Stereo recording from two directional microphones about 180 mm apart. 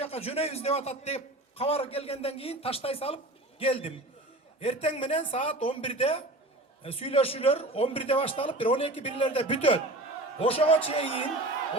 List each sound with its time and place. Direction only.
0.0 s a man's voice: 35° left (ahead or behind)